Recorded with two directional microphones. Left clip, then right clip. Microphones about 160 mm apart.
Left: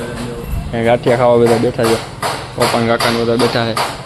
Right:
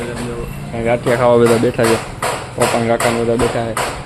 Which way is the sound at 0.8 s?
20° left (ahead or behind).